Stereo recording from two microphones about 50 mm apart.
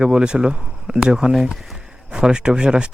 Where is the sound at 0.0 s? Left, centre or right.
Centre.